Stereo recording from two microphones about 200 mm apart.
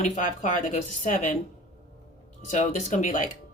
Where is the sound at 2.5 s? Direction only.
40° left (ahead or behind).